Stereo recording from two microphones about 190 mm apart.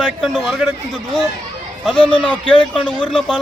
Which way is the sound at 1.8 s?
5° left (ahead or behind).